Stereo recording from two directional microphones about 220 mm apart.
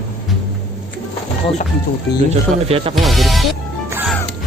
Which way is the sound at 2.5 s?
25° right (ahead or behind).